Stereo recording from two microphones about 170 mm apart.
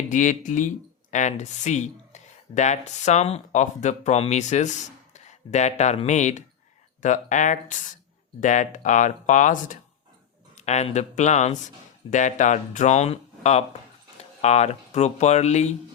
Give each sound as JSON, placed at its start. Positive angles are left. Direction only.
{"t": 0.1, "sound": "speech", "side_deg": 45}